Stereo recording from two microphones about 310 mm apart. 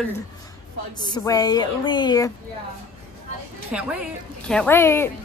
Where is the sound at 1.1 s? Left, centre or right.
Centre.